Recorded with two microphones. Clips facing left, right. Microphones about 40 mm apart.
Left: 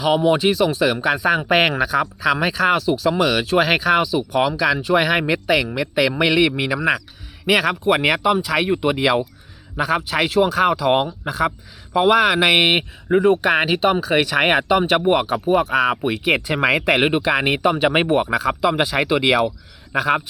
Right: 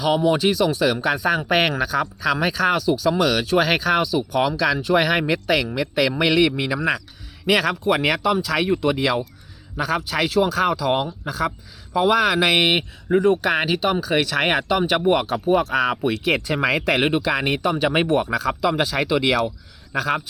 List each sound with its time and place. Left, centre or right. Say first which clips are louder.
0.0 s a man's voice: left 2 dB; centre